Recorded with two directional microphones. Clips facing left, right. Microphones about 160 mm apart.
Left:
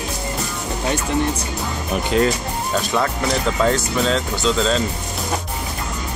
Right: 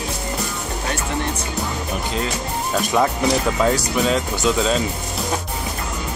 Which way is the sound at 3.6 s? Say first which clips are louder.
Left 2 dB; 10° right (ahead or behind).